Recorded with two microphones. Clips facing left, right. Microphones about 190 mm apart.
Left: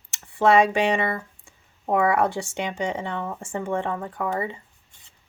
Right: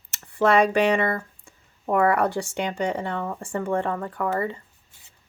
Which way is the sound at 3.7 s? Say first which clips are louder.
Right 1 dB; 50° right (ahead or behind).